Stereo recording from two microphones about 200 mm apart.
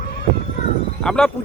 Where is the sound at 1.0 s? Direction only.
5° left (ahead or behind).